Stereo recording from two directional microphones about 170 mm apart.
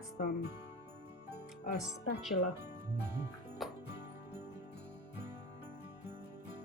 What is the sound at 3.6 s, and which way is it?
Music, centre (ahead or behind).